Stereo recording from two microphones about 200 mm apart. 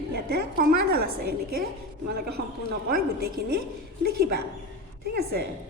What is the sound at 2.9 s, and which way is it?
Speech, 50° right (ahead or behind).